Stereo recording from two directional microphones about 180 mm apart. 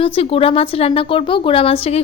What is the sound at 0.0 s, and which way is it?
Speech, 30° left (ahead or behind).